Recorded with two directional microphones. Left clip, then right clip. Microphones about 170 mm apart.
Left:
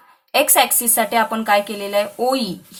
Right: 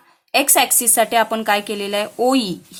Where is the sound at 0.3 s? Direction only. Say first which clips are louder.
Left 1 dB; 20° right (ahead or behind).